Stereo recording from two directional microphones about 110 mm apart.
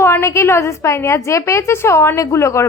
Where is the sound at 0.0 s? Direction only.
20° left (ahead or behind).